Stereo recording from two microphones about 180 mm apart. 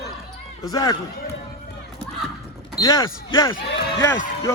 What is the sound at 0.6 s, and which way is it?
Speech, 20° left (ahead or behind).